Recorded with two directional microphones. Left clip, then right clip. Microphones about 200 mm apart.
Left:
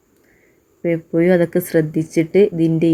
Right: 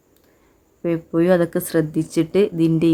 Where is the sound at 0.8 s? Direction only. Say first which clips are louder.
Left 2 dB; 5° left (ahead or behind).